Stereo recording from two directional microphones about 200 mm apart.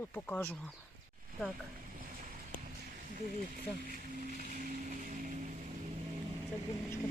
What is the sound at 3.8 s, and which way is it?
Boat, 45° right (ahead or behind).